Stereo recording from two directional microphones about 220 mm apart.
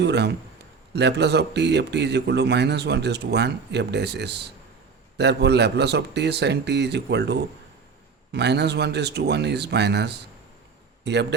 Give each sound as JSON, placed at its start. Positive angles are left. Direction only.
{"t": 0.0, "sound": "speech", "side_deg": -50}